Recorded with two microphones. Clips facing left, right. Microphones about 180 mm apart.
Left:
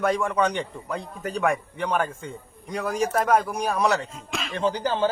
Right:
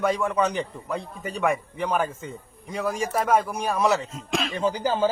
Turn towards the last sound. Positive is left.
turn(degrees=-10)  # may be behind; listen again after turning